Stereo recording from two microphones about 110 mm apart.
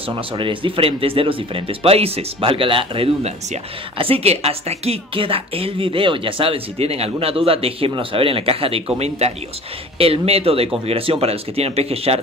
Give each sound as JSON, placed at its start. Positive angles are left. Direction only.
{"t": 0.1, "sound": "a woman's voice", "side_deg": -50}
{"t": 4.0, "sound": "a woman's voice", "side_deg": -65}
{"t": 8.9, "sound": "speech", "side_deg": -75}
{"t": 9.9, "sound": "a woman's voice", "side_deg": -60}